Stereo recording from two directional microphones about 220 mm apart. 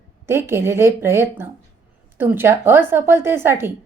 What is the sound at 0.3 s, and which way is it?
A woman's voice, 10° right (ahead or behind).